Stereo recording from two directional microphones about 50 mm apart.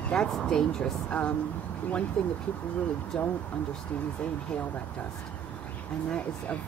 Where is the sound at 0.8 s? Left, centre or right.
Left.